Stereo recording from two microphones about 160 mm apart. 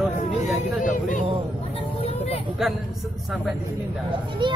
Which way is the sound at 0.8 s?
55° left (ahead or behind).